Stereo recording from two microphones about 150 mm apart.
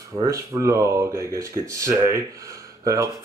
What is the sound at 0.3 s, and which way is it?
Speech, 20° right (ahead or behind).